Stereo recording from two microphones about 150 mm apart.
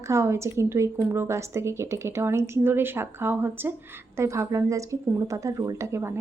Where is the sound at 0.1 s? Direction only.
20° right (ahead or behind).